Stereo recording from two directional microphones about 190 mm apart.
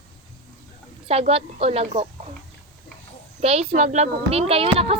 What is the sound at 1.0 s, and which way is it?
Speech, 30° right (ahead or behind).